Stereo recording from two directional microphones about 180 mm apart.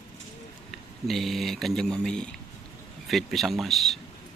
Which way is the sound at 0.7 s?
Centre (ahead or behind).